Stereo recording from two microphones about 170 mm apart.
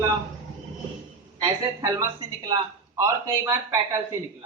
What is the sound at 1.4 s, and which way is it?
Speech, 20° right (ahead or behind).